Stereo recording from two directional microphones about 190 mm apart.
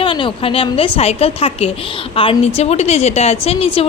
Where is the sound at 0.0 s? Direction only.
25° left (ahead or behind).